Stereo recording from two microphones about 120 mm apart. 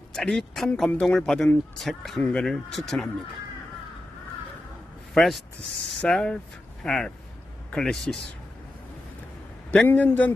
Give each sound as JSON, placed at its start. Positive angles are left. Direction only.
{"t": 0.1, "sound": "speech", "side_deg": 5}
{"t": 5.1, "sound": "a man's voice", "side_deg": 0}
{"t": 9.7, "sound": "a man's voice", "side_deg": 15}